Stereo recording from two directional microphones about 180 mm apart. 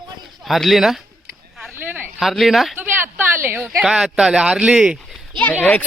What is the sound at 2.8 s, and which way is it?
Speech, 10° right (ahead or behind).